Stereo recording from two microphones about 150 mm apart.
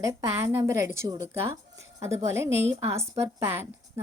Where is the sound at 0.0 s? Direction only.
20° right (ahead or behind).